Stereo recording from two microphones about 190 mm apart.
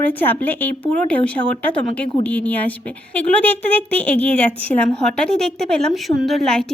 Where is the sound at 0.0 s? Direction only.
10° left (ahead or behind).